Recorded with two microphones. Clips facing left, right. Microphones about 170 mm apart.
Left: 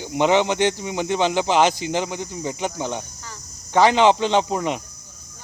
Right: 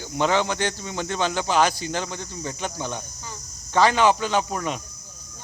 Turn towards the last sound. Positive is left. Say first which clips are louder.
# left 4 dB
turn(degrees=20)  # may be behind; listen again after turning